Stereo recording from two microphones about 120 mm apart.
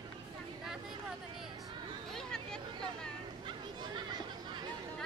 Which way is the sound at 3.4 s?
40° right (ahead or behind).